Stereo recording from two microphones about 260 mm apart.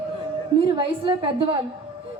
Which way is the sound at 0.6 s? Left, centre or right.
Centre.